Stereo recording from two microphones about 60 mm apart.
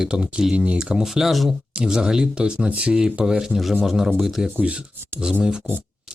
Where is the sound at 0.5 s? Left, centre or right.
Right.